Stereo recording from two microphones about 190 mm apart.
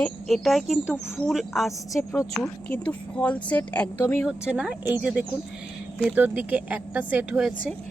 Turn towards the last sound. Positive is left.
turn(degrees=-5)  # may be behind; listen again after turning